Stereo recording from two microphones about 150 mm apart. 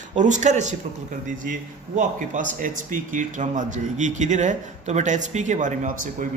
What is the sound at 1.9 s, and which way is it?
Speech, 60° right (ahead or behind).